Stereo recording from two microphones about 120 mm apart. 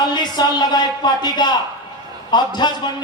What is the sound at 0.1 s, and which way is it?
Speech, 35° left (ahead or behind).